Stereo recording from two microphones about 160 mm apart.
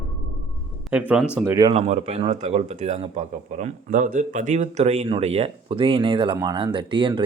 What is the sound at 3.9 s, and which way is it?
Speech, 55° right (ahead or behind).